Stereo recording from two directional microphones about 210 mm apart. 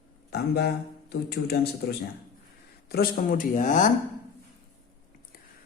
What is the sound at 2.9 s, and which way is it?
Speech, 45° left (ahead or behind).